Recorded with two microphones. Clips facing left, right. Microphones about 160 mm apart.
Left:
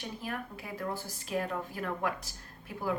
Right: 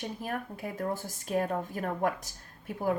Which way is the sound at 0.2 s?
45° right (ahead or behind).